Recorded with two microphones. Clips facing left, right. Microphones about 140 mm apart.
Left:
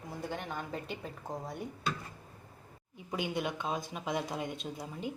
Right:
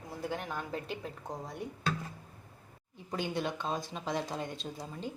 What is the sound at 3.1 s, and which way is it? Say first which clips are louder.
A woman's voice: even; 10° left (ahead or behind).